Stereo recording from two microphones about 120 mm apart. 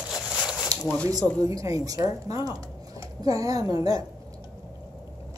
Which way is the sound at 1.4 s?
30° right (ahead or behind).